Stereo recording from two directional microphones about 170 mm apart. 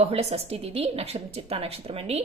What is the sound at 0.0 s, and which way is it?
A woman's voice, 35° right (ahead or behind).